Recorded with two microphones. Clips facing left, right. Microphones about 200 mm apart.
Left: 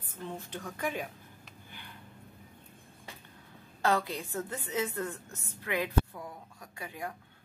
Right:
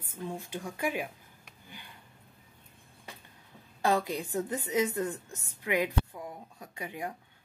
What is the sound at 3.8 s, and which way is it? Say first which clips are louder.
A woman's voice: right 1 dB; 15° right (ahead or behind).